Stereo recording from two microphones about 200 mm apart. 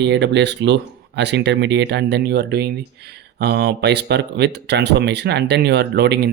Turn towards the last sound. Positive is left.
turn(degrees=-55)  # may be behind; listen again after turning